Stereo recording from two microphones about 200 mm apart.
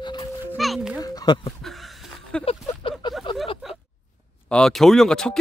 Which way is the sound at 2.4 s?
30° left (ahead or behind).